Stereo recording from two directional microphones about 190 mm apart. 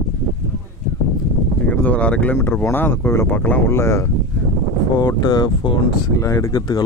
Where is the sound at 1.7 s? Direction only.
10° left (ahead or behind).